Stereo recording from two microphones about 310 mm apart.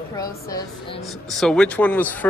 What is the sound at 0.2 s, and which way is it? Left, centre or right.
A woman's voice, centre.